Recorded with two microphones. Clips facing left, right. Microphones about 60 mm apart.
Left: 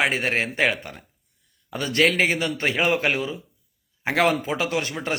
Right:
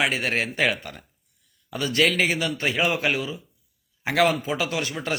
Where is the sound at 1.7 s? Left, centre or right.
Left.